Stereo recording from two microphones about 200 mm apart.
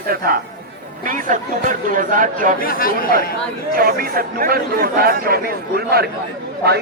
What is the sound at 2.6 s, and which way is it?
Speech, 45° left (ahead or behind).